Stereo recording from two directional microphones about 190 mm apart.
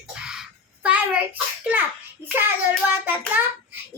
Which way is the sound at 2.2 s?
10° right (ahead or behind).